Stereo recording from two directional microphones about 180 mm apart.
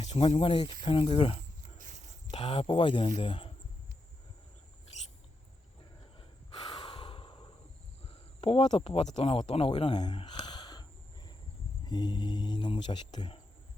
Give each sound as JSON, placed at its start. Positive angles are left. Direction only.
{"t": 0.0, "sound": "speech", "side_deg": 30}
{"t": 1.8, "sound": "a sound", "side_deg": -45}
{"t": 2.3, "sound": "speech", "side_deg": 30}
{"t": 6.1, "sound": "snort", "side_deg": 25}
{"t": 8.4, "sound": "speech", "side_deg": 30}